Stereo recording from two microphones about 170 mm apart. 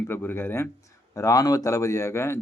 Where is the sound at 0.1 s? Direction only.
15° left (ahead or behind).